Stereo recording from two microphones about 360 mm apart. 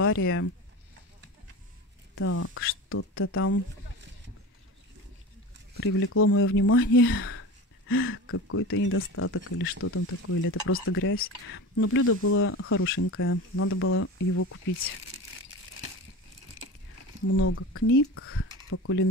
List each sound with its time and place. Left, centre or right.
0.0 s speech: left
2.1 s speech: left
5.9 s speech: left
17.3 s speech: left